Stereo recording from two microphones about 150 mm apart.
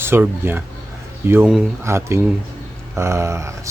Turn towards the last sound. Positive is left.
turn(degrees=-20)  # may be behind; listen again after turning